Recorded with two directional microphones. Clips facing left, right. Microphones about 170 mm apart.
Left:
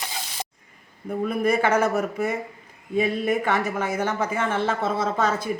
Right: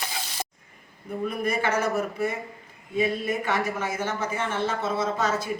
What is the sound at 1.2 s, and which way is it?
Speech, 55° left (ahead or behind).